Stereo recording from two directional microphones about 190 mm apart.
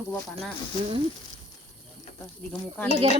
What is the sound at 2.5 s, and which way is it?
Speech, 10° left (ahead or behind).